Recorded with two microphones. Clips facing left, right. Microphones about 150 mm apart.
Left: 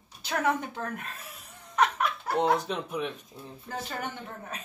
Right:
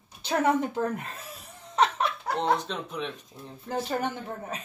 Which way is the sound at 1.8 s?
25° right (ahead or behind).